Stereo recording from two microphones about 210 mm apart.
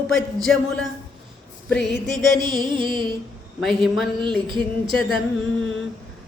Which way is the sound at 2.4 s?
20° right (ahead or behind).